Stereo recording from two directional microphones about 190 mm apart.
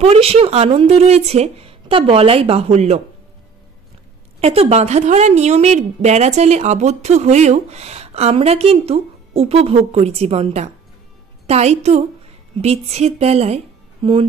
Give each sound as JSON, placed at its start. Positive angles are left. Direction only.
{"t": 0.0, "sound": "a woman's voice", "side_deg": -30}
{"t": 4.4, "sound": "a woman's voice", "side_deg": -35}